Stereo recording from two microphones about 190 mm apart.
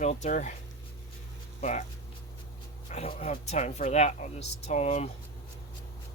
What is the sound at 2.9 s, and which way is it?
Speech, 30° left (ahead or behind).